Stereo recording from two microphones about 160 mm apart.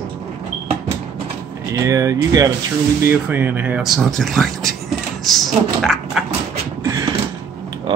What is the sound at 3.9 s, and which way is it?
Speech, centre (ahead or behind).